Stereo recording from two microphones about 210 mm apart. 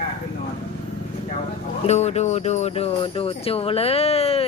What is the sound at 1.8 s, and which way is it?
Speech, 30° left (ahead or behind).